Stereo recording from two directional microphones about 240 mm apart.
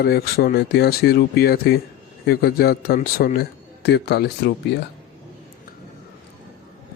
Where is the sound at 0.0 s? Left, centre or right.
Left.